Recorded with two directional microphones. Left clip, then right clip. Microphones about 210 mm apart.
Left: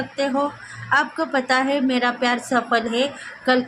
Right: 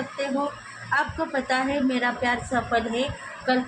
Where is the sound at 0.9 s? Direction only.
20° left (ahead or behind).